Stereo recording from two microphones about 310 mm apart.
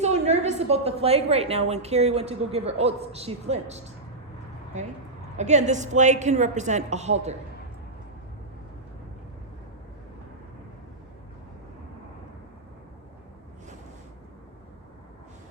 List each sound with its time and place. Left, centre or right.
0.0 s a woman's voice: right